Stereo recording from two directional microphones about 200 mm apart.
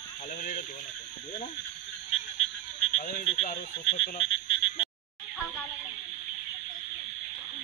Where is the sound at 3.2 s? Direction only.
30° left (ahead or behind).